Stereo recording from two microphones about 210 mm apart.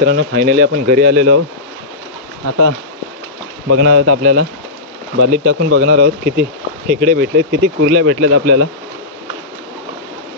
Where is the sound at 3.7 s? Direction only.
55° right (ahead or behind).